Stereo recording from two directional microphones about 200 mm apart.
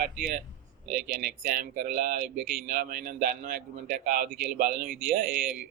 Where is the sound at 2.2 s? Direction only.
5° right (ahead or behind).